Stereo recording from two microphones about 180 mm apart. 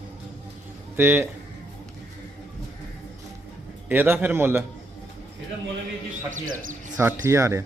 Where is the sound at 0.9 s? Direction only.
10° right (ahead or behind).